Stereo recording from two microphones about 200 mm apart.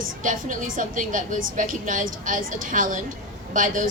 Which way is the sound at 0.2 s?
40° right (ahead or behind).